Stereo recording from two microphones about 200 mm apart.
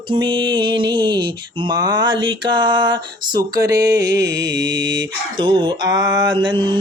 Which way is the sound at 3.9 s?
60° right (ahead or behind).